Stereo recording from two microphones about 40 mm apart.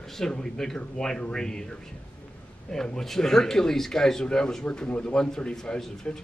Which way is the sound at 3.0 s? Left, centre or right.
Centre.